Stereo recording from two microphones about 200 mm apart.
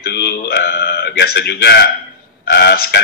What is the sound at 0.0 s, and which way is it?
Speech, 55° left (ahead or behind).